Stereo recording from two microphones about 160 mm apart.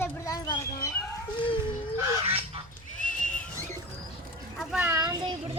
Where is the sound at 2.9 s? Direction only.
55° left (ahead or behind).